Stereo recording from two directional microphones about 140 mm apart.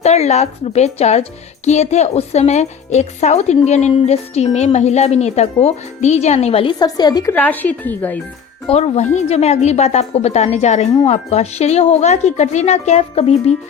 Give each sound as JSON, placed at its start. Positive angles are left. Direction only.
{"t": 0.0, "sound": "speech", "side_deg": 50}
{"t": 6.7, "sound": "a woman's voice", "side_deg": 30}
{"t": 7.3, "sound": "a woman's voice", "side_deg": 10}
{"t": 8.7, "sound": "speech", "side_deg": 50}